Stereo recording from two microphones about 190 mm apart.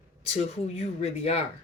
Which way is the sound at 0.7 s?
35° left (ahead or behind).